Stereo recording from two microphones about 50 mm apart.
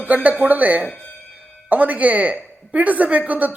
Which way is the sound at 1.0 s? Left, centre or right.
Left.